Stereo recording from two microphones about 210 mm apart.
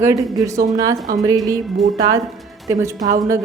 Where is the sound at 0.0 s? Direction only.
15° right (ahead or behind).